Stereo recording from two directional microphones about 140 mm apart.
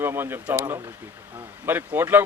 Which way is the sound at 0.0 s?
15° right (ahead or behind).